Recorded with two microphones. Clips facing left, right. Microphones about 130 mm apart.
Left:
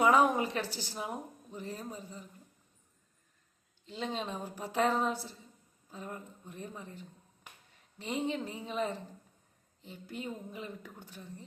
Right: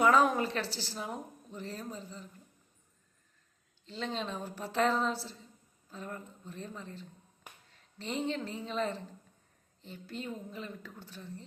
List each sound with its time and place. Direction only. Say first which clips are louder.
0.0 s a woman's voice: even; 15° left (ahead or behind)
3.8 s a woman's voice: even; 15° left (ahead or behind)